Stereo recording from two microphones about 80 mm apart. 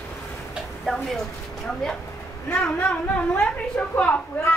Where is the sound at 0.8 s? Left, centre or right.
Centre.